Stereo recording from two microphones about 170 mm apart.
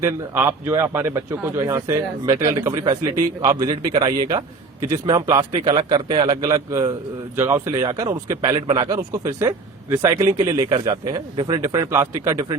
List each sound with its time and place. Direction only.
0.0 s a man's voice: 15° right (ahead or behind)